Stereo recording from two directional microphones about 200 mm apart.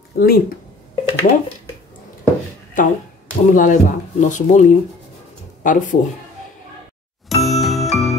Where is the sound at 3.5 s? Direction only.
40° left (ahead or behind).